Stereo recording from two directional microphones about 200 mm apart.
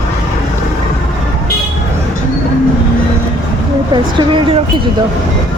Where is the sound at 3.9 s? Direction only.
25° right (ahead or behind).